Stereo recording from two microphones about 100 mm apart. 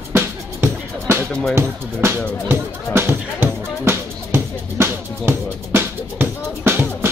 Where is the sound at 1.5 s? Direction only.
25° right (ahead or behind).